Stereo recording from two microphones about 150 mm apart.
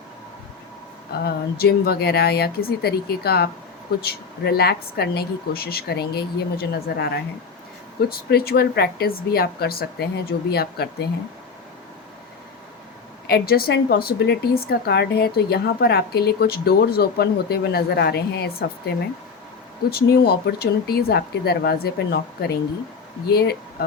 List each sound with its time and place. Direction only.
1.2 s a woman's voice: 90° left
8.1 s a woman's voice: 90° left
13.2 s a woman's voice: 90° left
19.9 s a woman's voice: 90° left